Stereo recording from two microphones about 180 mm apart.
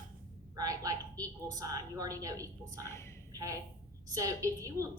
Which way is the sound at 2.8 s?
15° left (ahead or behind).